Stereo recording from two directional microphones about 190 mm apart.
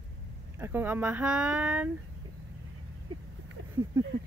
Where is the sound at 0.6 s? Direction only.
10° right (ahead or behind).